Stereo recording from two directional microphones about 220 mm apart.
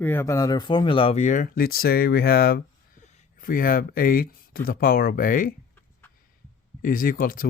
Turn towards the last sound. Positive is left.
turn(degrees=40)  # may be behind; listen again after turning